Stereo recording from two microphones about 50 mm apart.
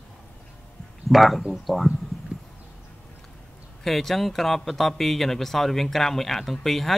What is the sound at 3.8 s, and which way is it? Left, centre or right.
Speech, centre.